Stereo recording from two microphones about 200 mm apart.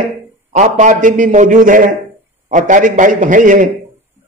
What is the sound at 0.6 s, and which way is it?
A man's voice, 40° right (ahead or behind).